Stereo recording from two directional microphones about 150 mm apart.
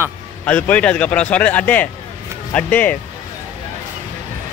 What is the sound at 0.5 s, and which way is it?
A man's voice, 10° left (ahead or behind).